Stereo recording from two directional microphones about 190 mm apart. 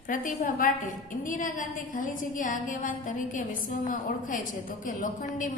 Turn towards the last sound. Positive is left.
turn(degrees=45)  # may be behind; listen again after turning